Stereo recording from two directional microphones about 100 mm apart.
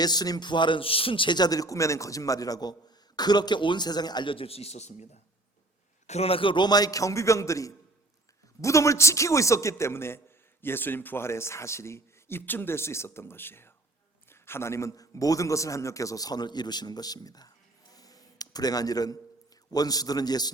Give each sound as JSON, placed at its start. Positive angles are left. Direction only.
{"t": 0.0, "sound": "a man's voice", "side_deg": 40}
{"t": 17.9, "sound": "a sound", "side_deg": 40}
{"t": 19.7, "sound": "a man's voice", "side_deg": 40}